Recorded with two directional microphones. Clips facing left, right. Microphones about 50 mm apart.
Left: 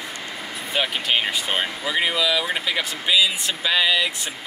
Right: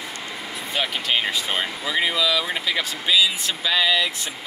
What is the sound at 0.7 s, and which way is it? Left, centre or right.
Speech, centre.